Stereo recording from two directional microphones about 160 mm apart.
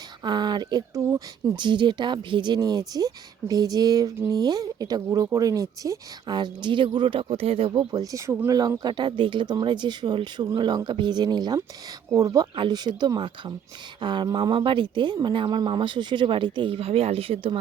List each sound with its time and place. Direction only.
0.2 s speech: 25° right (ahead or behind)